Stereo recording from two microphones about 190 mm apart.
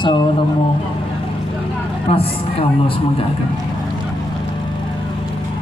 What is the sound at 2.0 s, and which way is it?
A man's voice, 30° left (ahead or behind).